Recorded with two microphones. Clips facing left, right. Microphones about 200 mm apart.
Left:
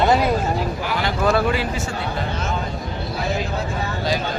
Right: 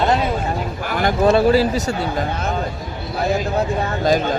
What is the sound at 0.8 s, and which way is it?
Speech, 50° right (ahead or behind).